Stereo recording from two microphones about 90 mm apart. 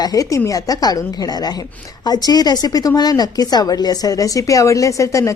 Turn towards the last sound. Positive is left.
turn(degrees=35)  # may be behind; listen again after turning